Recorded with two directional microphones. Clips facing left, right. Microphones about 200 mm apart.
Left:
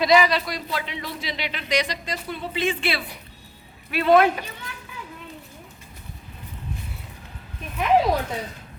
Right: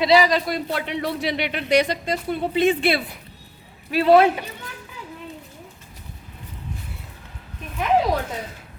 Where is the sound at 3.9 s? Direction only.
35° right (ahead or behind).